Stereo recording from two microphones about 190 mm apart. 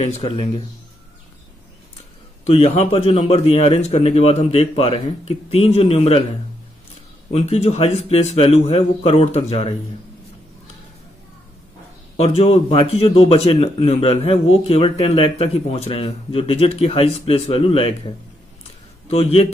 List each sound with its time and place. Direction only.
0.0 s speech: 35° left (ahead or behind)
2.4 s speech: 35° left (ahead or behind)
7.3 s speech: 30° left (ahead or behind)
12.2 s speech: 30° left (ahead or behind)